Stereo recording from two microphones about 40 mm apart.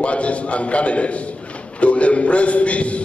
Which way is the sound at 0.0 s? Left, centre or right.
Left.